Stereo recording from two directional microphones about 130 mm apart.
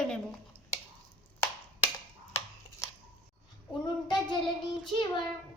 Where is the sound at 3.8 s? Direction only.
35° left (ahead or behind).